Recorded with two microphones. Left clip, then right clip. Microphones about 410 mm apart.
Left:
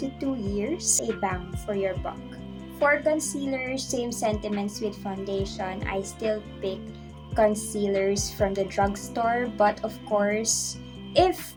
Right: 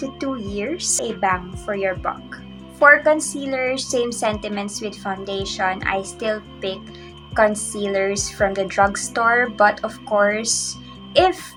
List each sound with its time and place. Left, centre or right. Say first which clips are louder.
0.2 s music: right 3 dB; left
1.2 s a woman's voice: right 9 dB; left